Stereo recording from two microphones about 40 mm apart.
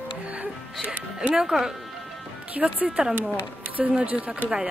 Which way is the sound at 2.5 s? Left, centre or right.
Right.